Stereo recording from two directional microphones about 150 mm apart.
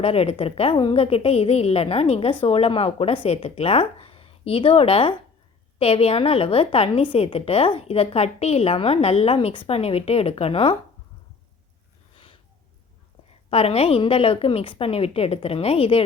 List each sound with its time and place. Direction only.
0.0 s a woman's voice: 40° left (ahead or behind)
12.1 s a sound: 35° left (ahead or behind)
13.5 s a woman's voice: 40° left (ahead or behind)